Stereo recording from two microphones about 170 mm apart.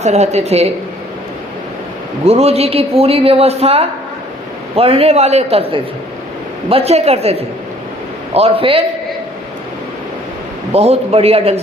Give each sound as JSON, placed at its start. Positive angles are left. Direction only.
{"t": 0.0, "sound": "speech", "side_deg": -40}
{"t": 2.2, "sound": "speech", "side_deg": -35}
{"t": 10.7, "sound": "speech", "side_deg": -35}